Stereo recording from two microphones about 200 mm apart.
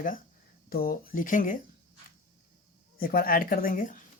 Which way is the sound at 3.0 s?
45° left (ahead or behind).